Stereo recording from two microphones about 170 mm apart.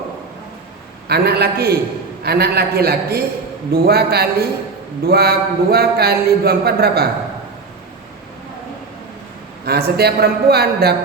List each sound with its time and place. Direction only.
1.0 s a man's voice: 70° right (ahead or behind)
9.6 s a man's voice: 70° right (ahead or behind)